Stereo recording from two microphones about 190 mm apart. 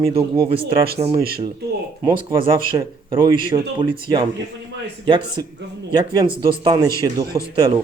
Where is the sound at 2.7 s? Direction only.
15° right (ahead or behind).